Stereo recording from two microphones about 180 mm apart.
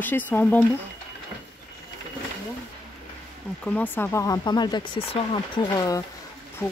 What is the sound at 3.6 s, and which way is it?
Speech, 10° left (ahead or behind).